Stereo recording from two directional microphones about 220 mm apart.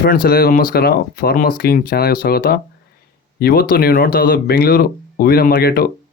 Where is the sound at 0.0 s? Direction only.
40° left (ahead or behind).